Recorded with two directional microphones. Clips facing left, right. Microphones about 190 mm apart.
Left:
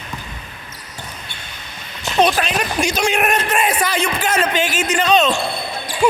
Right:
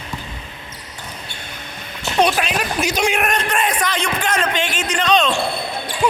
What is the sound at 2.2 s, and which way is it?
Speech, 5° right (ahead or behind).